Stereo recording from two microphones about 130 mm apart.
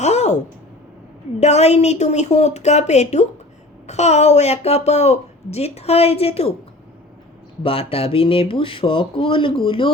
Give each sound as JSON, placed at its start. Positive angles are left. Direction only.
{"t": 0.0, "sound": "a sound", "side_deg": 60}
{"t": 1.4, "sound": "a woman's voice", "side_deg": 55}
{"t": 7.6, "sound": "speech", "side_deg": 45}